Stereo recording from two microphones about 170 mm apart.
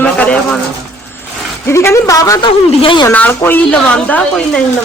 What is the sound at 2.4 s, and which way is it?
Speech, 30° left (ahead or behind).